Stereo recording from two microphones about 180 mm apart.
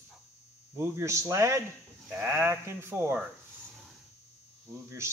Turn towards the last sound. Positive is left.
turn(degrees=-15)  # may be behind; listen again after turning